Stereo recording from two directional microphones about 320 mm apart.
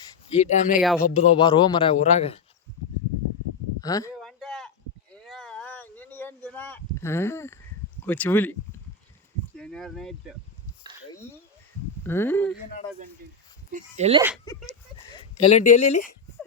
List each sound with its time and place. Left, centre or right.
0.4 s speech: left
0.8 s speech: centre
1.0 s a man's voice: centre
3.8 s a man's voice: centre
4.2 s a sound: centre
8.0 s speech: centre
9.6 s speech: centre
12.0 s a man's voice: centre
13.7 s speech: right
14.4 s a sound: centre
15.1 s speech: centre